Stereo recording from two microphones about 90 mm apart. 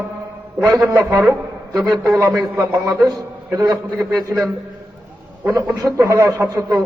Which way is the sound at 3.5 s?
40° right (ahead or behind).